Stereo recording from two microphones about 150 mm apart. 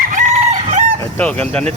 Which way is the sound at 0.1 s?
55° right (ahead or behind).